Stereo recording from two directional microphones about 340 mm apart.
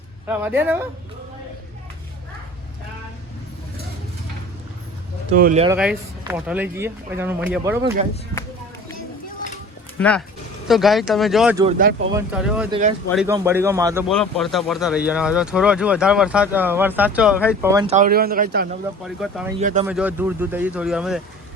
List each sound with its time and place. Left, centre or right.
0.3 s speech: centre
5.4 s speech: right
5.7 s speech: centre
10.0 s speech: centre
11.6 s speech: right
12.1 s a man's voice: centre; by 18.7 s right
19.0 s speech: centre
19.5 s speech: right
19.9 s speech: centre